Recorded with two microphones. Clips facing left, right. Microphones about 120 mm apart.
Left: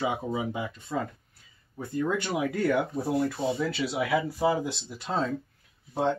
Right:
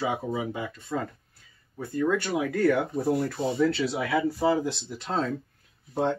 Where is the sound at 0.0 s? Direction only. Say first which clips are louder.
Even; 20° left (ahead or behind).